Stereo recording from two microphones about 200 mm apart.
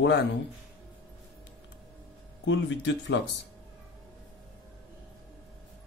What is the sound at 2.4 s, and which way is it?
Speech, 65° left (ahead or behind).